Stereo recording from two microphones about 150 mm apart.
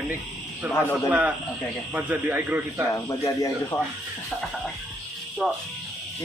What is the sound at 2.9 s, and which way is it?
Speech, 20° left (ahead or behind).